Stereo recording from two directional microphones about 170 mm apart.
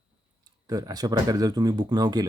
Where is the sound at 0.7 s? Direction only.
20° right (ahead or behind).